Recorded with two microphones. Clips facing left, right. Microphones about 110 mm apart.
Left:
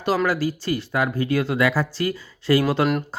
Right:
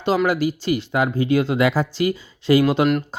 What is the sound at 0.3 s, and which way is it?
Speech, 15° right (ahead or behind).